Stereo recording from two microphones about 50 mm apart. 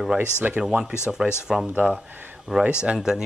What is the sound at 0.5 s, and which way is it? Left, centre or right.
Speech, centre.